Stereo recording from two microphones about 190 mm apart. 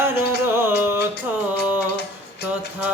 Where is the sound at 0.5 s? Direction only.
10° right (ahead or behind).